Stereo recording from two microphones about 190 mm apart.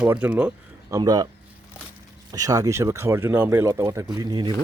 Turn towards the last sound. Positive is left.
turn(degrees=-25)  # may be behind; listen again after turning